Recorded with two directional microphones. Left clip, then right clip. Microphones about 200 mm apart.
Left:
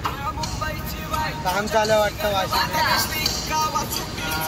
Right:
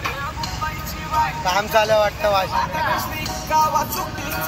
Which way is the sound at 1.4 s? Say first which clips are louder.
Right 1 dB; 20° left (ahead or behind).